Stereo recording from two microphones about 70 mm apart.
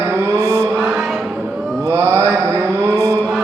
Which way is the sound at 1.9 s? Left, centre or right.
Right.